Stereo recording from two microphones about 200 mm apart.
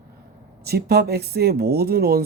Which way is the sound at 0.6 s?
55° right (ahead or behind).